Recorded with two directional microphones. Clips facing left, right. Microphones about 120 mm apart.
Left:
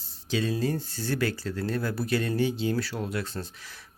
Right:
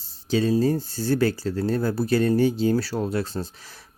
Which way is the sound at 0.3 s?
35° right (ahead or behind).